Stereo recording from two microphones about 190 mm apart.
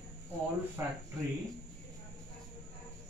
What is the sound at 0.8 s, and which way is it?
Speech, 10° right (ahead or behind).